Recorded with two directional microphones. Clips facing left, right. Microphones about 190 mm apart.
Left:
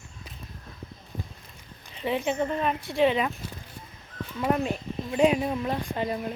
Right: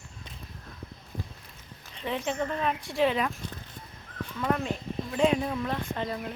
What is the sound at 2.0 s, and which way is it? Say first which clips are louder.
Speech: left 4 dB; 5° left (ahead or behind).